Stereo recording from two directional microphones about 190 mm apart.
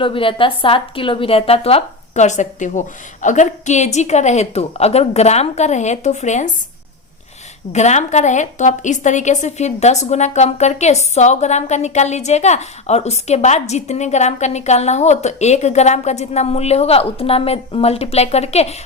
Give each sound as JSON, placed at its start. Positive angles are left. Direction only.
{"t": 0.0, "sound": "a woman's voice", "side_deg": 25}
{"t": 7.7, "sound": "a woman's voice", "side_deg": 35}